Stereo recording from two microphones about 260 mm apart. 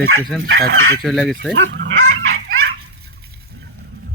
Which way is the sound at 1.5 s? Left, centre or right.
Right.